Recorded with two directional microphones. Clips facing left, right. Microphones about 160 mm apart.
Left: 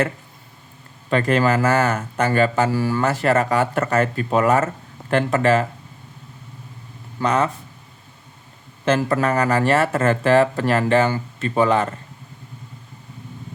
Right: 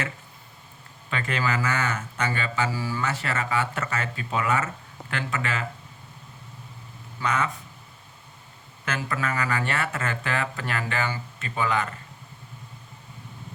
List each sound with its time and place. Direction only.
1.1 s speech: 45° left (ahead or behind)
7.2 s speech: 40° left (ahead or behind)
8.8 s speech: 35° left (ahead or behind)